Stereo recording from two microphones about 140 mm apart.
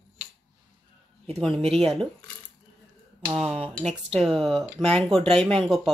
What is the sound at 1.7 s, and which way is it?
Speech, 5° left (ahead or behind).